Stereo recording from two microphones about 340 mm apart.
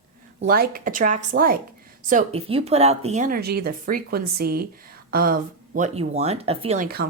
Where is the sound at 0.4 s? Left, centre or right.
Right.